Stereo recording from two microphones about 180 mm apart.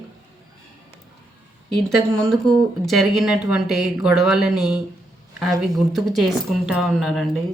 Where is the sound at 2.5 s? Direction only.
Centre (ahead or behind).